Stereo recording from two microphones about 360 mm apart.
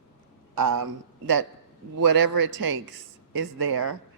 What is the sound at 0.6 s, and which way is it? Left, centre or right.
Speech, right.